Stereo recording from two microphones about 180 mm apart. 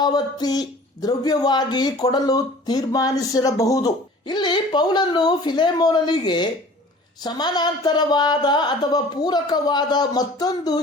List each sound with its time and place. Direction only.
0.0 s speech: 20° left (ahead or behind)